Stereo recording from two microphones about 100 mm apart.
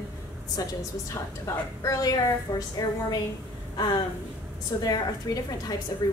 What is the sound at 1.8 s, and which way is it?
A woman's voice, 35° left (ahead or behind).